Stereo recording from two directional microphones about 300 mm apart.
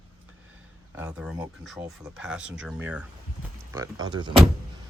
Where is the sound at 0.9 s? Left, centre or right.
Centre.